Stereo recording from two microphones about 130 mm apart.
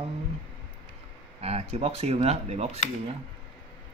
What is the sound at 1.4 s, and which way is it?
Speech, 50° right (ahead or behind).